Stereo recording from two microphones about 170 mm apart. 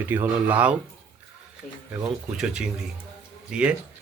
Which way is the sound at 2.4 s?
5° right (ahead or behind).